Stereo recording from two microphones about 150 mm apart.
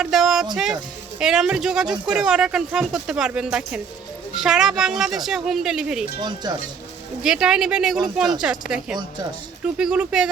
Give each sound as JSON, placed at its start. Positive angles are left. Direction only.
{"t": 0.0, "sound": "speech", "side_deg": -5}
{"t": 0.5, "sound": "music", "side_deg": -5}
{"t": 1.2, "sound": "speech", "side_deg": -5}
{"t": 6.1, "sound": "speech", "side_deg": -30}
{"t": 7.2, "sound": "speech", "side_deg": -5}